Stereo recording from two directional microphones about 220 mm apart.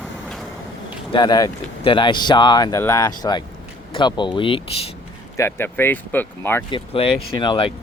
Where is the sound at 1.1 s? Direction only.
20° left (ahead or behind).